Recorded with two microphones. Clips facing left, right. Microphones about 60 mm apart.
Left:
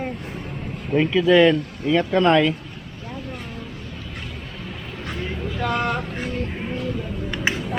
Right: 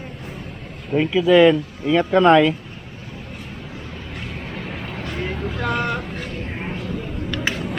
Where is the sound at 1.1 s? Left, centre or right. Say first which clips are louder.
Right 2 dB; centre.